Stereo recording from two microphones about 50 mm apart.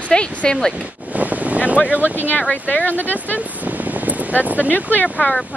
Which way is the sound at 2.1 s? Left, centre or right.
Left.